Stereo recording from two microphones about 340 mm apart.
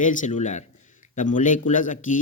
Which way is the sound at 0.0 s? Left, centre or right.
Left.